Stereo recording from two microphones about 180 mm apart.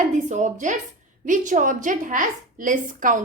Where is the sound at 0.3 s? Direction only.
45° right (ahead or behind).